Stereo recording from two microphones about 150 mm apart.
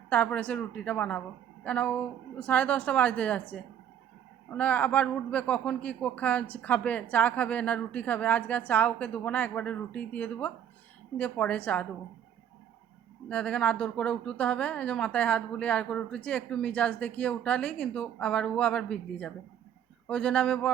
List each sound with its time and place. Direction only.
0.1 s speech: 10° left (ahead or behind)
13.2 s speech: 5° left (ahead or behind)